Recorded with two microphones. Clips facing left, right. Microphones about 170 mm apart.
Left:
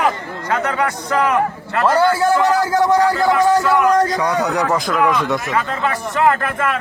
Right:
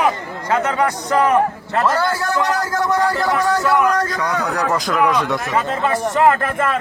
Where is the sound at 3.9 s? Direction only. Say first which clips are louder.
Left 4 dB; 25° left (ahead or behind).